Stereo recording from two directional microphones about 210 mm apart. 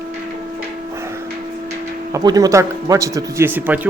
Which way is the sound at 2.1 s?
15° right (ahead or behind).